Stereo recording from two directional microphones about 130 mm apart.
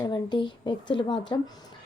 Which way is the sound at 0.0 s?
35° left (ahead or behind).